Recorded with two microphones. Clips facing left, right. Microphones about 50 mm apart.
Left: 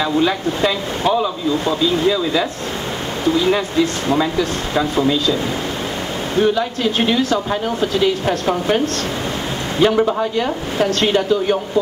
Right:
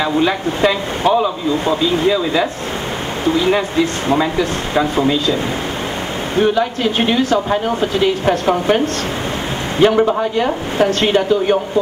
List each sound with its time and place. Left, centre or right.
0.0 s speech: right
6.3 s speech: right